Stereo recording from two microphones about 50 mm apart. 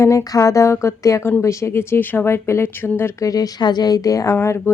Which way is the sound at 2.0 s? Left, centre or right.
Left.